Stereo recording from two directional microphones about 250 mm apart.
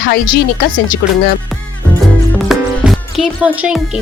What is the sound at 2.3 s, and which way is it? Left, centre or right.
Music, centre.